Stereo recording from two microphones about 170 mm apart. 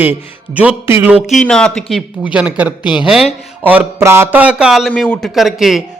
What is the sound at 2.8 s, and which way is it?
Speech, 25° left (ahead or behind).